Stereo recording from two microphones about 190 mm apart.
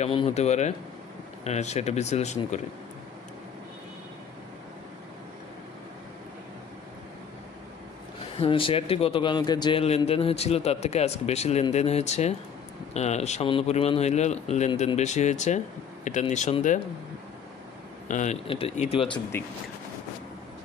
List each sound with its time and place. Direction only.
0.0 s a man's voice: 30° left (ahead or behind)
8.4 s a man's voice: 30° left (ahead or behind)
18.0 s a man's voice: 40° left (ahead or behind)
19.3 s speech: 10° left (ahead or behind)